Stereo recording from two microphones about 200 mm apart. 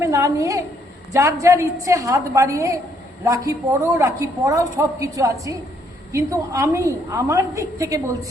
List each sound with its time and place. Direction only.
0.0 s a woman's voice: 15° right (ahead or behind)